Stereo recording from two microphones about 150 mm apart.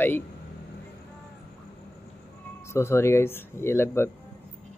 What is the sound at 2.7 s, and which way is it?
Speech, 20° left (ahead or behind).